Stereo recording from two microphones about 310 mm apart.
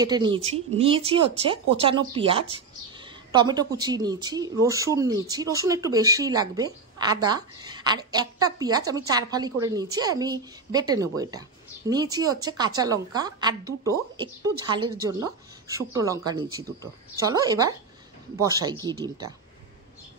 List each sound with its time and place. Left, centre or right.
0.0 s speech: centre